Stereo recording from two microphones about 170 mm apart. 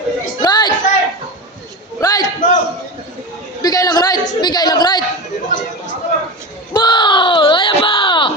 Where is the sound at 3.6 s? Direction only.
20° left (ahead or behind).